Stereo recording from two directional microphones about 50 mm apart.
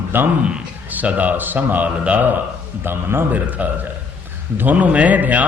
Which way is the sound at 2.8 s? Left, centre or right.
Right.